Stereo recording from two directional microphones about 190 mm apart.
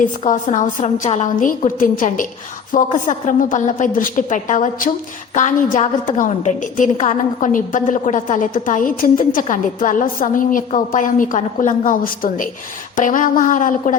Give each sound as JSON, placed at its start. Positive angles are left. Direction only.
{"t": 0.0, "sound": "a woman's voice", "side_deg": 40}